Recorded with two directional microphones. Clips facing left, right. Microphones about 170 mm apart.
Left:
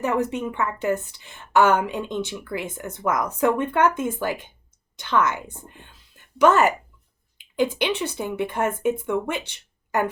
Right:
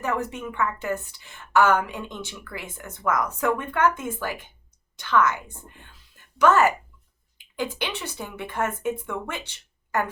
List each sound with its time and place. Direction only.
0.0 s speech: 20° left (ahead or behind)
6.4 s speech: 20° left (ahead or behind)